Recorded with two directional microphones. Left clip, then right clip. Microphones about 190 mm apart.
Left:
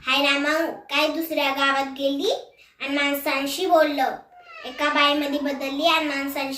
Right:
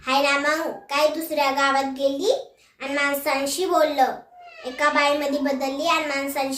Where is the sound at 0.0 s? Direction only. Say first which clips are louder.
Right 1 dB; 20° right (ahead or behind).